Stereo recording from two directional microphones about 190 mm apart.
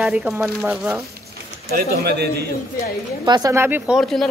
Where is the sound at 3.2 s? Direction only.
20° right (ahead or behind); by 4.2 s centre (ahead or behind).